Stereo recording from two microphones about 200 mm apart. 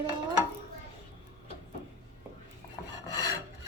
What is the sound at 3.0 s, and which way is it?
Filing, 15° left (ahead or behind).